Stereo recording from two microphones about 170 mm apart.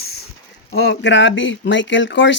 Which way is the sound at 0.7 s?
75° left (ahead or behind).